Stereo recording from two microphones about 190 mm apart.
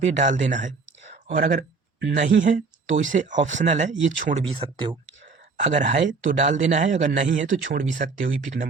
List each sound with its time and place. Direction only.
0.0 s speech: 40° right (ahead or behind)
5.2 s speech: 40° right (ahead or behind)